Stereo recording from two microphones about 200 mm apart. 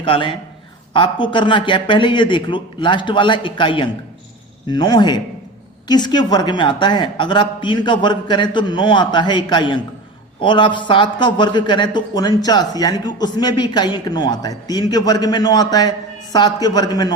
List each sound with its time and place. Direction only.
0.0 s a man's voice: 25° left (ahead or behind)